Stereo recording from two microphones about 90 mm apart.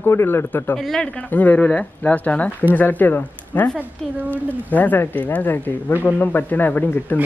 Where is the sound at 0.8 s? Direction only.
5° left (ahead or behind).